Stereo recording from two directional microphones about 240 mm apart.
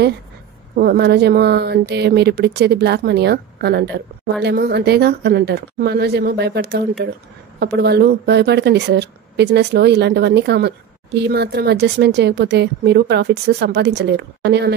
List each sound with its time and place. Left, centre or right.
0.7 s a woman's voice: right